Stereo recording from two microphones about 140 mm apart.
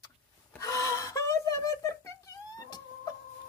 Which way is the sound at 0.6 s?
25° left (ahead or behind).